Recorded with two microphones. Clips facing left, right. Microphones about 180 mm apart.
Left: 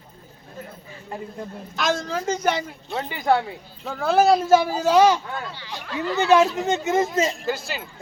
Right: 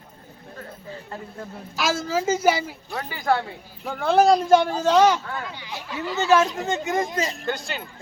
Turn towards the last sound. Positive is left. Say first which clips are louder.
# left 1 dB
turn(degrees=0)  # may be behind; listen again after turning